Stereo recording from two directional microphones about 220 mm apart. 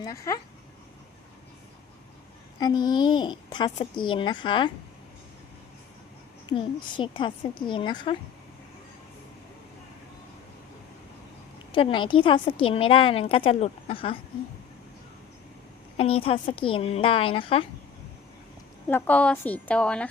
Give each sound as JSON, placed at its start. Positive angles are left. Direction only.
{"t": 0.0, "sound": "a woman's voice", "side_deg": 15}
{"t": 2.6, "sound": "a woman's voice", "side_deg": 20}
{"t": 6.5, "sound": "a woman's voice", "side_deg": 20}
{"t": 11.7, "sound": "a woman's voice", "side_deg": 20}
{"t": 16.0, "sound": "a woman's voice", "side_deg": 25}
{"t": 18.9, "sound": "a woman's voice", "side_deg": 10}